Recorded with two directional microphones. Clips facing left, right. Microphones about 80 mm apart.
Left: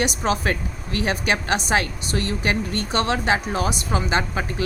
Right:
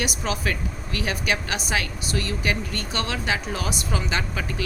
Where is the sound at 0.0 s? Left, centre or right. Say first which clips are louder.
Left 5 dB; left.